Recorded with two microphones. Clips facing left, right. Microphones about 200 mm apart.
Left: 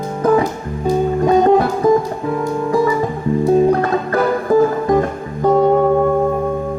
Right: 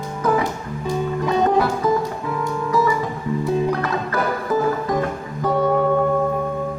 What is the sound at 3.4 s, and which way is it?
Music, 50° left (ahead or behind).